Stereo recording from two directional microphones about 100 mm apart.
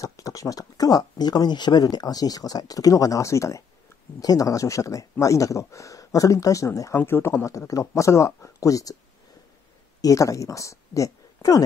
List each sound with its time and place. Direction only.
0.0 s speech: 35° left (ahead or behind)
10.0 s speech: 35° left (ahead or behind)